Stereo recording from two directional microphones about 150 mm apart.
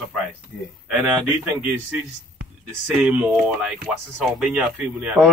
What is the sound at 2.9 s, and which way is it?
Speech, 10° right (ahead or behind).